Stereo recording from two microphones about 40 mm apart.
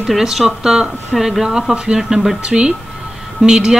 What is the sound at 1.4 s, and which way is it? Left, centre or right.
Speech, centre.